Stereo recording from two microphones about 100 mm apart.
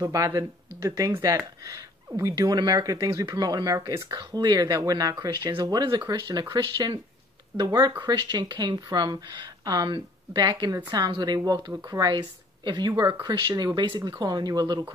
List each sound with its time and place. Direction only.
0.0 s speech: 35° right (ahead or behind)
2.3 s speech: 45° right (ahead or behind)
6.6 s speech: 35° right (ahead or behind)